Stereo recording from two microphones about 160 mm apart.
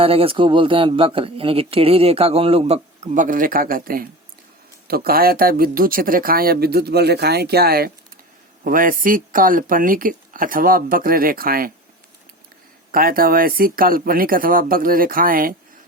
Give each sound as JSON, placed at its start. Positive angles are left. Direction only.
{"t": 0.0, "sound": "speech", "side_deg": -35}
{"t": 8.6, "sound": "speech", "side_deg": -60}
{"t": 12.9, "sound": "speech", "side_deg": -65}